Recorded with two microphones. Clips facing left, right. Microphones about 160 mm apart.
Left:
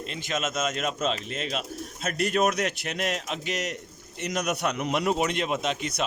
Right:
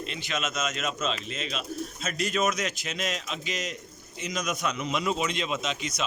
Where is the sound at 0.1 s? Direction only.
45° left (ahead or behind).